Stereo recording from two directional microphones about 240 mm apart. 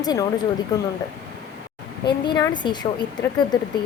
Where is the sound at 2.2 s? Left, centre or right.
Centre.